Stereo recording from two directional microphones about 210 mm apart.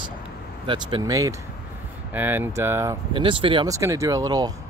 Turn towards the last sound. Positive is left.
turn(degrees=-20)  # may be behind; listen again after turning